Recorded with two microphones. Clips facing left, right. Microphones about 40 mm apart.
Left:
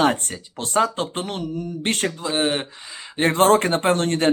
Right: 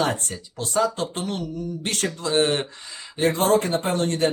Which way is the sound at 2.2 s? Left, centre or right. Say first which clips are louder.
Right 2 dB; centre.